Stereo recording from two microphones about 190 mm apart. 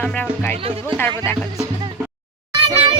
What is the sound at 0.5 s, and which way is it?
Speech, 30° right (ahead or behind).